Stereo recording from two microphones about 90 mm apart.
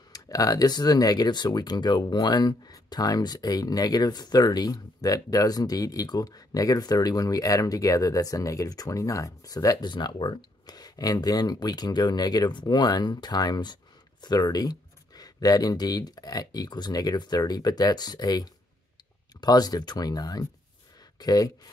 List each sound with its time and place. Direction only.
0.1 s speech: 40° left (ahead or behind)
9.8 s speech: 60° left (ahead or behind)